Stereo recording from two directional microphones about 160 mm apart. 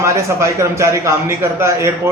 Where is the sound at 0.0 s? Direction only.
20° right (ahead or behind).